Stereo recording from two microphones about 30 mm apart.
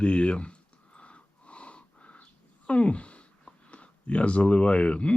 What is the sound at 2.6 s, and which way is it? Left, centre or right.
Speech, left.